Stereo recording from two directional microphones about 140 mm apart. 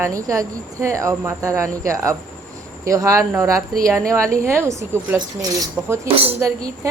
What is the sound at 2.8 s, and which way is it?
A woman's voice, 20° right (ahead or behind).